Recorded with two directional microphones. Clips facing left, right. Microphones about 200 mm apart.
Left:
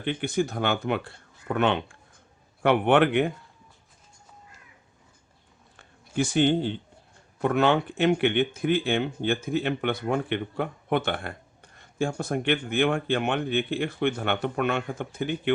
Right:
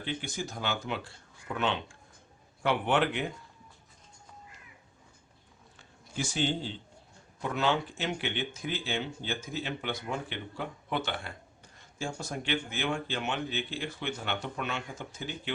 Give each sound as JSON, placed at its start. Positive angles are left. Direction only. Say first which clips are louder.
{"t": 0.0, "sound": "speech", "louder": "left 10 dB", "side_deg": 60}
{"t": 5.7, "sound": "a sound", "louder": "left 9 dB", "side_deg": 55}
{"t": 7.4, "sound": "speech", "louder": "left 7 dB", "side_deg": 60}